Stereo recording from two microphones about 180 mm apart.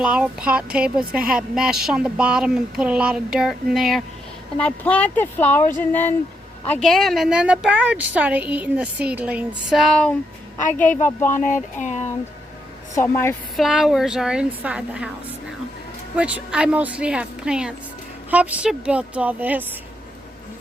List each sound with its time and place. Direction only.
0.0 s a woman's voice: 5° right (ahead or behind); by 11.4 s 10° left (ahead or behind)
11.4 s speech: 45° left (ahead or behind)
12.9 s speech: 15° left (ahead or behind)
13.6 s speech: centre (ahead or behind)
16.1 s a woman's voice: 5° right (ahead or behind)